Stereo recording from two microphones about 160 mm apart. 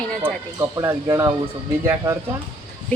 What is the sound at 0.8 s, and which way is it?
Speech, 20° right (ahead or behind).